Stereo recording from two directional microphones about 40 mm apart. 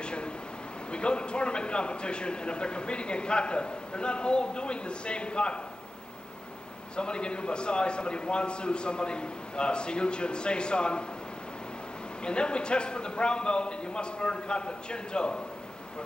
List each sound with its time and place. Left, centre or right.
0.0 s a sound: left
0.9 s a man's voice: left
7.0 s a man's voice: left
12.2 s a man's voice: left